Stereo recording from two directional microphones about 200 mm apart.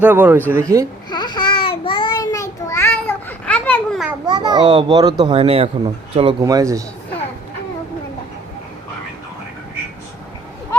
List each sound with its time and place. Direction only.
0.0 s speech: 10° right (ahead or behind)
1.1 s child singing: 20° left (ahead or behind); by 4.1 s 5° left (ahead or behind)
4.3 s a child's voice: 20° right (ahead or behind)
6.4 s speech: 15° right (ahead or behind)